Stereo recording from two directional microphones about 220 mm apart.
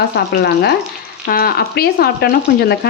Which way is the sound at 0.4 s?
45° left (ahead or behind).